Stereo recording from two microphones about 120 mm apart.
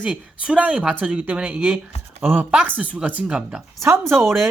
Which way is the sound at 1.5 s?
Centre (ahead or behind).